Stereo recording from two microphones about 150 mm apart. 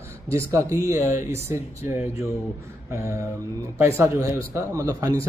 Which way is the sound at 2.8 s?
20° right (ahead or behind).